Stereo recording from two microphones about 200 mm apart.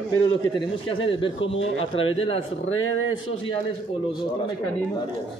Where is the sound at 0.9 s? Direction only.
25° left (ahead or behind).